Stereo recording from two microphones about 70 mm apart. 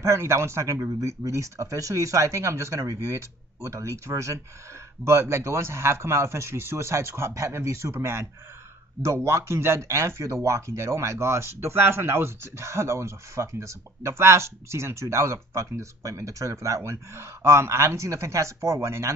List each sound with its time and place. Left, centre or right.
0.0 s speech: right